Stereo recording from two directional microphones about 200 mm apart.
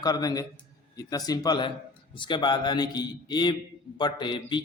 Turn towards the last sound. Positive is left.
turn(degrees=25)  # may be behind; listen again after turning